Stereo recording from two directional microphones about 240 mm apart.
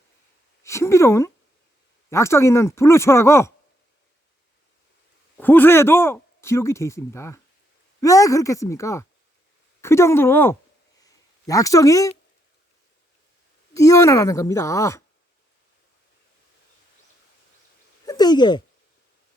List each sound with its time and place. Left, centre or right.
0.6 s a sound: centre
2.0 s speech: centre
5.4 s speech: centre
11.0 s a sound: centre
13.7 s speech: centre
18.0 s speech: centre